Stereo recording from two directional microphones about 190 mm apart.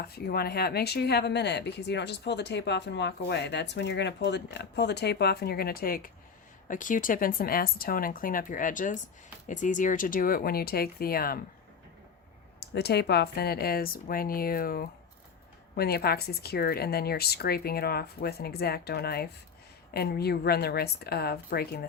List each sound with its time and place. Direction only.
0.0 s speech: 55° left (ahead or behind)
12.5 s speech: 60° left (ahead or behind)